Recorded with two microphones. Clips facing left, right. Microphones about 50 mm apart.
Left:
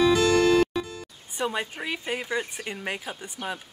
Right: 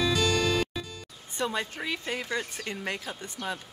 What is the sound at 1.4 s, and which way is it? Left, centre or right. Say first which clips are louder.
Speech: left 2 dB; centre.